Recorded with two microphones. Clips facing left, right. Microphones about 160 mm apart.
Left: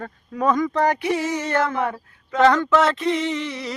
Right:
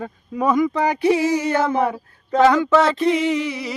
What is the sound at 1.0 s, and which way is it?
Female singing, 30° right (ahead or behind).